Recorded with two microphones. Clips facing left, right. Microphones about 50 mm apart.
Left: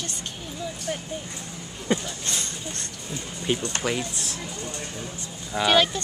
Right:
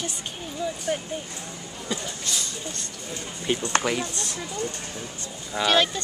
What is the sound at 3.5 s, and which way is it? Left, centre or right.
Speech, centre.